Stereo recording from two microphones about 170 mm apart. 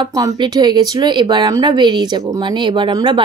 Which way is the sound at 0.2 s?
25° right (ahead or behind).